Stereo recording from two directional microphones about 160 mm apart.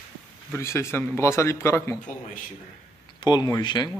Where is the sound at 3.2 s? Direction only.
25° left (ahead or behind).